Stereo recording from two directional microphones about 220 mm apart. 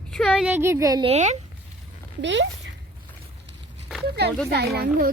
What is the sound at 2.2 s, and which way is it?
Speech, 55° right (ahead or behind).